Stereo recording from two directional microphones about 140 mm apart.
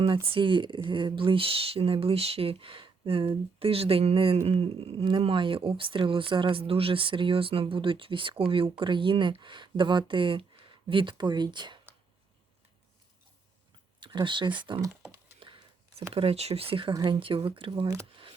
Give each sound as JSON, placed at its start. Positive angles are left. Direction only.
{"t": 0.3, "sound": "speech", "side_deg": -35}
{"t": 14.0, "sound": "speech", "side_deg": -35}
{"t": 16.1, "sound": "speech", "side_deg": -45}